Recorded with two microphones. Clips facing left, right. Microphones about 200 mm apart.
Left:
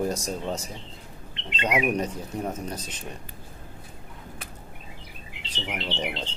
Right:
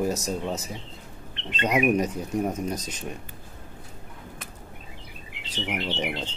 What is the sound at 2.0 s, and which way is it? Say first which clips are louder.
Speech: right 4 dB; 10° right (ahead or behind).